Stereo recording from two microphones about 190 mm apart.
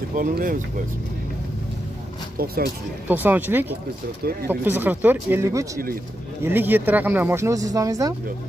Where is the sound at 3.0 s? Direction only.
10° right (ahead or behind).